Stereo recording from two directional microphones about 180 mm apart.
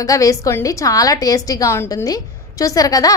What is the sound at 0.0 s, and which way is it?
A woman's voice, 20° left (ahead or behind).